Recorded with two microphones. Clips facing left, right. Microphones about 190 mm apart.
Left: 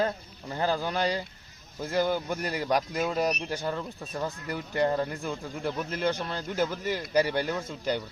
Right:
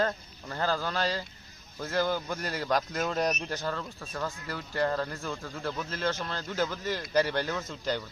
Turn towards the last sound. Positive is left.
turn(degrees=10)  # may be behind; listen again after turning